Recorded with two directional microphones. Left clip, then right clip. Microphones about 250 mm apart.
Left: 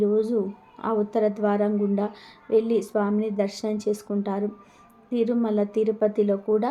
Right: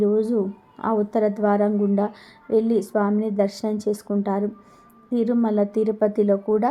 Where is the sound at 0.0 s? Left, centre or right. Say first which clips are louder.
Right 2 dB; centre.